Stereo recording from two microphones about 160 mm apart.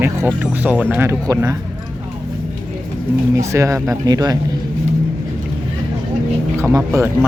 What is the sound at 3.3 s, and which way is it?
Speech, 20° right (ahead or behind).